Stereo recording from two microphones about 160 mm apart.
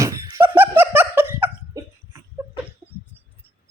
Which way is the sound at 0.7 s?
10° right (ahead or behind).